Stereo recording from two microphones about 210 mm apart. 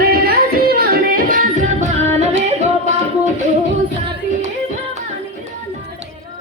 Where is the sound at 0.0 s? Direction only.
45° right (ahead or behind).